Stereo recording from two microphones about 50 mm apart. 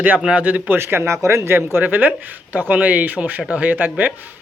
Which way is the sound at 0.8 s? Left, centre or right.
Right.